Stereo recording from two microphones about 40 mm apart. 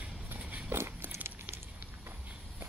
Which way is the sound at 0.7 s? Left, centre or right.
Right.